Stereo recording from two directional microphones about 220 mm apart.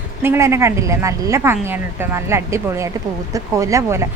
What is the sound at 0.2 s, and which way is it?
Speech, 10° right (ahead or behind).